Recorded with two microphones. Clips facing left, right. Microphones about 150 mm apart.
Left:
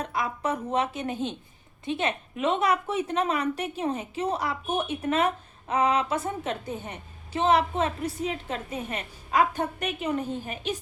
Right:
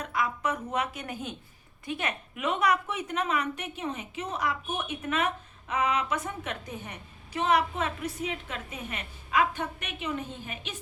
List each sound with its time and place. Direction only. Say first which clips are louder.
0.0 s a woman's voice: left 1 dB; 30° left (ahead or behind)